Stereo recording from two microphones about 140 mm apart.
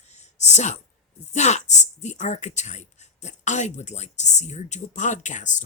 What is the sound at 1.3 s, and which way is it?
A woman's voice, 55° left (ahead or behind).